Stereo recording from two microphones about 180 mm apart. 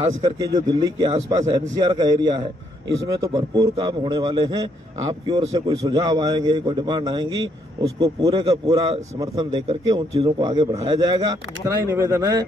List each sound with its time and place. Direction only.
0.0 s a man's voice: 20° right (ahead or behind)
9.2 s a man's voice: 20° right (ahead or behind)